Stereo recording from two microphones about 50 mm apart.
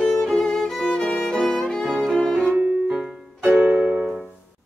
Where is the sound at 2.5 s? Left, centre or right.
Right.